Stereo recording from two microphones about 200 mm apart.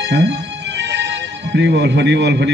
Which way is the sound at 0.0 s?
60° right (ahead or behind).